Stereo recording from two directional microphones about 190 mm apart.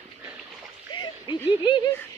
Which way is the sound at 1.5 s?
25° left (ahead or behind).